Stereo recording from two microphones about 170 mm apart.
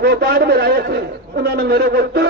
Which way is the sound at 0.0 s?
65° right (ahead or behind).